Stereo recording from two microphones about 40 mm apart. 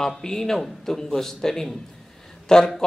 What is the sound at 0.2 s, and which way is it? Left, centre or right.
Speech, centre.